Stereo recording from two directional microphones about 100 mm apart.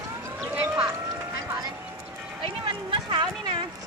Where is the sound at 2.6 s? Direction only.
50° right (ahead or behind).